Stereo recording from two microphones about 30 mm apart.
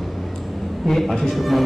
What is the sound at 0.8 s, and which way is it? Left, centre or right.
Speech, centre.